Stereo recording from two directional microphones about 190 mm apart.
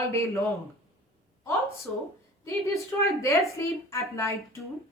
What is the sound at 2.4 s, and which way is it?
A woman's voice, 15° left (ahead or behind).